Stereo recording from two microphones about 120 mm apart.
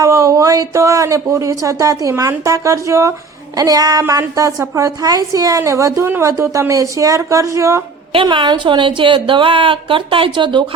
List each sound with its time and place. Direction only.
0.0 s a woman's voice: 30° right (ahead or behind)
8.1 s a woman's voice: 45° right (ahead or behind)